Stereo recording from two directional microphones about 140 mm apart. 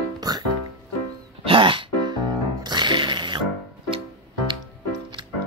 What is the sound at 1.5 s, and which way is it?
Music, 40° right (ahead or behind).